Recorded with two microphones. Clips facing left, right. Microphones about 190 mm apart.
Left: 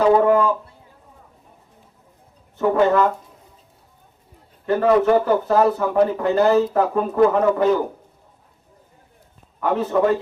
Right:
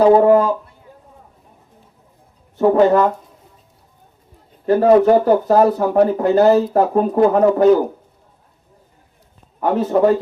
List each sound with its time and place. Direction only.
0.0 s speech: 35° right (ahead or behind)
2.6 s speech: 40° right (ahead or behind)
4.6 s speech: 40° right (ahead or behind)
9.6 s speech: 35° right (ahead or behind)